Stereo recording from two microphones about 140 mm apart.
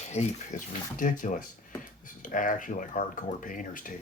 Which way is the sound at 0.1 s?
55° left (ahead or behind).